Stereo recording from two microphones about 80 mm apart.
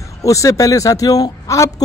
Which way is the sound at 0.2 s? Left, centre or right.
Left.